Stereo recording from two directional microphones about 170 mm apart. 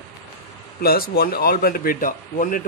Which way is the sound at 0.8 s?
60° left (ahead or behind).